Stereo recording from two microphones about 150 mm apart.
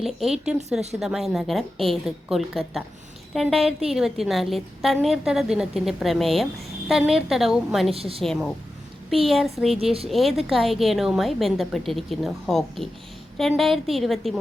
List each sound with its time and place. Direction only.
0.0 s a woman's voice: centre (ahead or behind)
7.9 s a woman's voice: 40° right (ahead or behind)
8.2 s a woman's voice: centre (ahead or behind)